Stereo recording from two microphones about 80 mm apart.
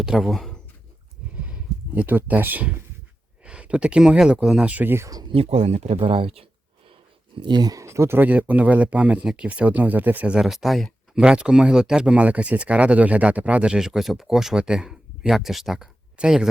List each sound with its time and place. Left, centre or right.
0.0 s speech: centre
2.0 s speech: right
7.3 s speech: right
7.7 s speech: right; by 16.5 s centre